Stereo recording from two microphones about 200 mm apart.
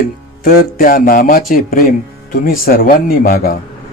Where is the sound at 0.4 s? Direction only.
45° left (ahead or behind).